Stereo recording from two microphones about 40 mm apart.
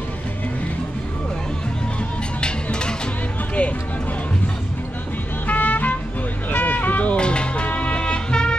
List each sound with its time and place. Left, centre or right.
2.4 s music: left
5.5 s music: left
6.5 s a sound: left
7.2 s music: left